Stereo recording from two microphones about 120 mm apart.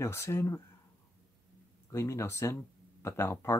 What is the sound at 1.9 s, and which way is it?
Speech, 25° left (ahead or behind).